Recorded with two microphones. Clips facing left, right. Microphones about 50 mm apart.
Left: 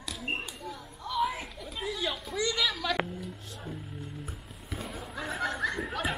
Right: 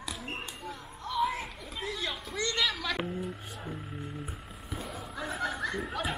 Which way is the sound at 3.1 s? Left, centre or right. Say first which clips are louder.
Right 4 dB; right.